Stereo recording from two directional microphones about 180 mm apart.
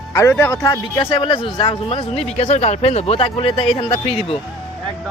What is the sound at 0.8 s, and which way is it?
Speech, 25° left (ahead or behind).